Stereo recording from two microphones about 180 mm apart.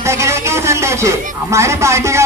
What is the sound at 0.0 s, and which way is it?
Speech, 15° right (ahead or behind).